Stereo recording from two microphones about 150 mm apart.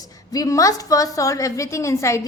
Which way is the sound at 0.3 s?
20° left (ahead or behind).